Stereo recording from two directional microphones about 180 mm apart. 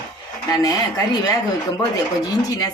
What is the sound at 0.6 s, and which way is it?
Speech, 20° left (ahead or behind).